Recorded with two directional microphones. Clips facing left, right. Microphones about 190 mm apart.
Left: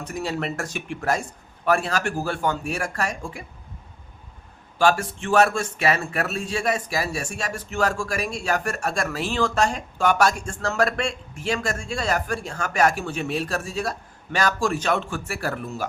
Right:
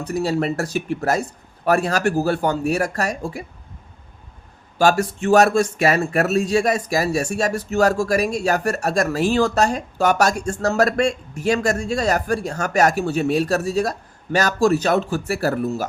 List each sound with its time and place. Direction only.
0.0 s speech: 35° right (ahead or behind)
4.8 s speech: 40° right (ahead or behind)